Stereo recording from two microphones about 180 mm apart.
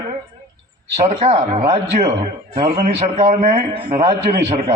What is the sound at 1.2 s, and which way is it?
Speech, 30° right (ahead or behind).